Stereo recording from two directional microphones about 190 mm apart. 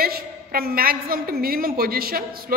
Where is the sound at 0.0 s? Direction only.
50° right (ahead or behind).